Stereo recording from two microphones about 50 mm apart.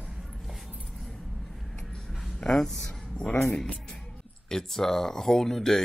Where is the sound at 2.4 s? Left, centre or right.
Centre.